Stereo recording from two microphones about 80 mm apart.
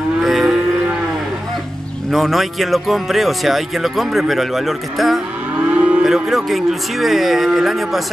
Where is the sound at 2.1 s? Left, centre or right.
Centre.